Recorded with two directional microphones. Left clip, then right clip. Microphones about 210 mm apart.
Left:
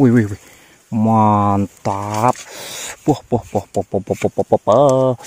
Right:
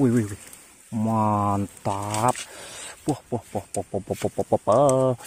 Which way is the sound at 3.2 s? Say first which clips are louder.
Left 11 dB; 45° left (ahead or behind).